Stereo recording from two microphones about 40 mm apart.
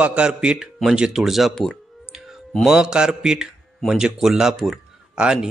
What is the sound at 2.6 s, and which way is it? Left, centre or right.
A man's voice, centre.